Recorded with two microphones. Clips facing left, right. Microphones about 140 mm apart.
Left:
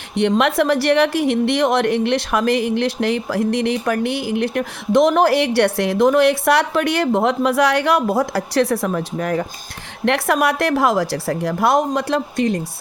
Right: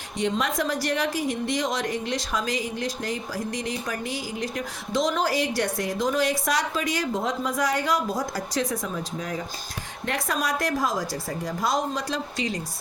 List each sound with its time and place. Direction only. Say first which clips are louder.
0.2 s a woman's voice: left 9 dB; 70° left (ahead or behind)